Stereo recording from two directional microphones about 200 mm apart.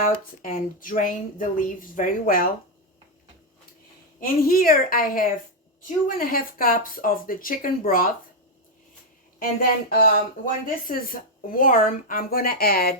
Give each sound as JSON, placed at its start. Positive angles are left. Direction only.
{"t": 0.0, "sound": "speech", "side_deg": 45}
{"t": 4.2, "sound": "speech", "side_deg": 45}
{"t": 9.4, "sound": "speech", "side_deg": 45}